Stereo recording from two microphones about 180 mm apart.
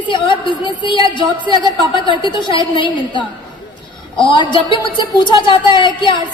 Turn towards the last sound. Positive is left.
turn(degrees=25)  # may be behind; listen again after turning